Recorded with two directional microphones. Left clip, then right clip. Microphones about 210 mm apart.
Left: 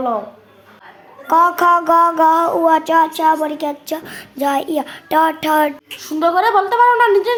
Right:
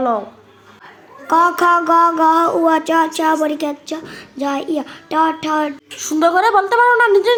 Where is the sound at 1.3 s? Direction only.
5° left (ahead or behind).